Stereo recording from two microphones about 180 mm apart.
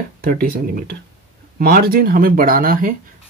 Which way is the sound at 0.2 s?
55° right (ahead or behind).